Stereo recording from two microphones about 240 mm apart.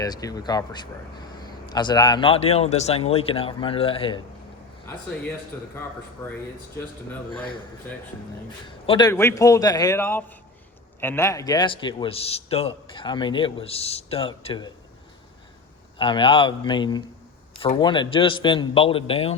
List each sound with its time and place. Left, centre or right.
0.0 s a man's voice: centre
5.5 s a man's voice: centre
8.6 s a man's voice: centre
16.0 s a man's voice: left